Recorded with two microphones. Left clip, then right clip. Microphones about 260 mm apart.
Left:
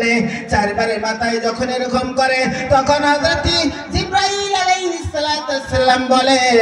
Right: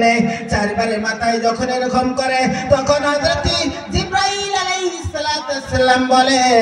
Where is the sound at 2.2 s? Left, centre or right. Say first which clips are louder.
Left 1 dB; left.